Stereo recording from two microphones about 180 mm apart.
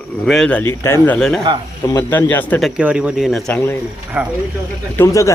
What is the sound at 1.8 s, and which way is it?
A man's voice, 15° left (ahead or behind).